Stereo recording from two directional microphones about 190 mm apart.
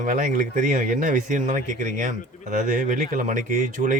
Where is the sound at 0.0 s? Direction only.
45° right (ahead or behind).